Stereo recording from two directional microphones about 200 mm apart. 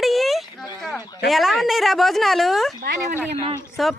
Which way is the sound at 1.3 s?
Centre (ahead or behind).